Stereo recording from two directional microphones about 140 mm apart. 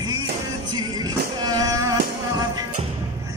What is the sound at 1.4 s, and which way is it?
Music, 25° right (ahead or behind).